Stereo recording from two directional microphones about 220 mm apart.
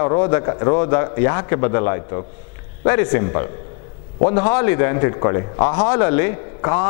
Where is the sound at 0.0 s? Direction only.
15° left (ahead or behind).